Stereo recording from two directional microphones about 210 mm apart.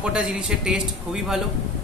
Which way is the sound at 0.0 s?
5° right (ahead or behind).